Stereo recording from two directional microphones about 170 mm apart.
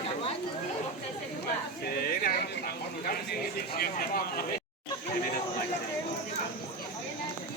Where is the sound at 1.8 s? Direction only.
65° left (ahead or behind).